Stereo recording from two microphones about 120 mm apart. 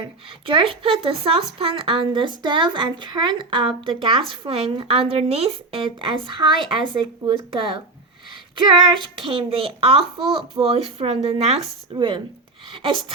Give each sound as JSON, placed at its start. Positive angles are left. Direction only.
{"t": 0.0, "sound": "speech", "side_deg": -45}
{"t": 11.9, "sound": "speech", "side_deg": -45}
{"t": 12.7, "sound": "a sound", "side_deg": -45}